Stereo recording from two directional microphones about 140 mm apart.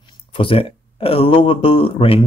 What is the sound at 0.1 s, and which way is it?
Speech, 40° left (ahead or behind).